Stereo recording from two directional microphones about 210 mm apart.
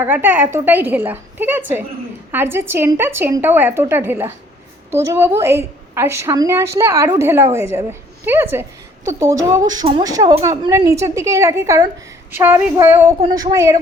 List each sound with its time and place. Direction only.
0.0 s a woman's voice: 10° right (ahead or behind)